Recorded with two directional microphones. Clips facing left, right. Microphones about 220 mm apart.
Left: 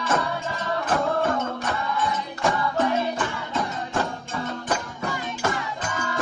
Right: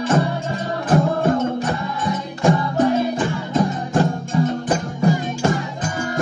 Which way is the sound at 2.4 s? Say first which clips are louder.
Right 7 dB; 35° right (ahead or behind).